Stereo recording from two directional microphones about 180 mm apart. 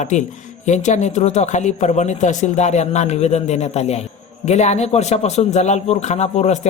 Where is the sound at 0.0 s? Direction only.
40° left (ahead or behind).